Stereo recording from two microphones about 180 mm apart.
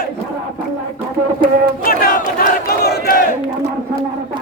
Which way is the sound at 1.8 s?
55° left (ahead or behind).